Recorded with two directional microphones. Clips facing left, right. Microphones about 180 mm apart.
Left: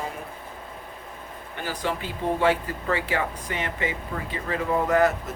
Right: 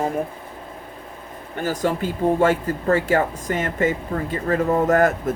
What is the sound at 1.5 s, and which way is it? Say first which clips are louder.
Speech: right 7 dB; 45° right (ahead or behind).